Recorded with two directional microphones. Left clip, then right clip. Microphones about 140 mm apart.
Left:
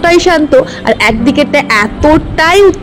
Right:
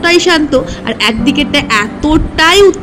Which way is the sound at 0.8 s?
30° left (ahead or behind).